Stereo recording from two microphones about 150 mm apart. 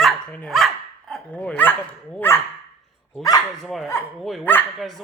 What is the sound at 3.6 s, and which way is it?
Speech, centre (ahead or behind).